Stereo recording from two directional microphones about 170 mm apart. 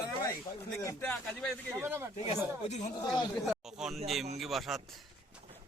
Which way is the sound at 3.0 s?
25° left (ahead or behind).